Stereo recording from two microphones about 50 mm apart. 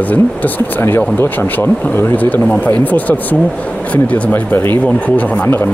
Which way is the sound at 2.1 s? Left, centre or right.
Left.